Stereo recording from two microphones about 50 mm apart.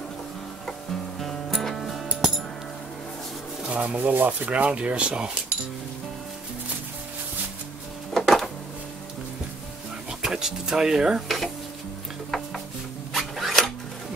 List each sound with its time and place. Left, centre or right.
1.2 s music: centre
3.7 s speech: right
8.1 s a sound: centre
10.2 s speech: centre
11.2 s speech: centre
13.1 s zipper: centre